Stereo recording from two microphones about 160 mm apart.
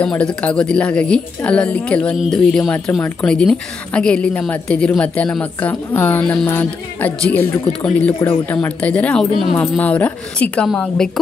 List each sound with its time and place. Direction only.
0.0 s speech: 5° left (ahead or behind)